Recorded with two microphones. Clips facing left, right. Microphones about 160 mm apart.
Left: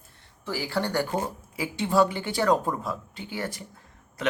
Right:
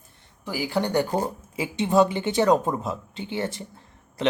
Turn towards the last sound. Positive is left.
turn(degrees=-25)  # may be behind; listen again after turning